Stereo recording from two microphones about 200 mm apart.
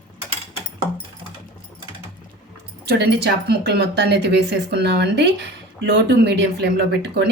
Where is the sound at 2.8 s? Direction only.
55° right (ahead or behind).